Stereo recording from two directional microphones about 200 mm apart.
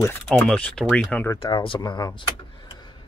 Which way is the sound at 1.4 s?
25° left (ahead or behind).